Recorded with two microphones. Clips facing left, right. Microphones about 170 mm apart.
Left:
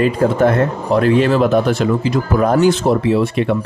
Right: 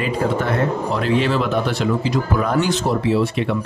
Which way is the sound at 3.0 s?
55° left (ahead or behind).